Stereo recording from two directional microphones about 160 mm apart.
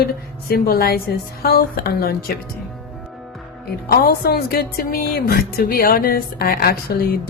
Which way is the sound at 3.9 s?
75° left (ahead or behind).